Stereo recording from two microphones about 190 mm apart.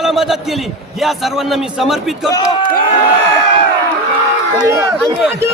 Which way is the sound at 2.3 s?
20° left (ahead or behind).